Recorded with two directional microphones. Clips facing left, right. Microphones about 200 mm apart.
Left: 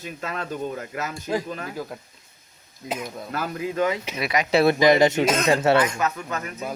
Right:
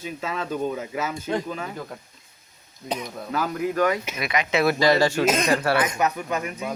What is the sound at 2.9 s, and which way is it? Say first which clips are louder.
Speech: even; 5° left (ahead or behind).